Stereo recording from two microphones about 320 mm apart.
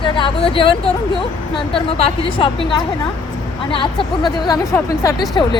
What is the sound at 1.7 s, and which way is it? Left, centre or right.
Speech, centre.